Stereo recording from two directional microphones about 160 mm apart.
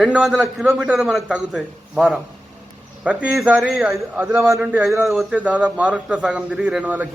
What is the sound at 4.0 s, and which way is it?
A man's voice, 15° right (ahead or behind).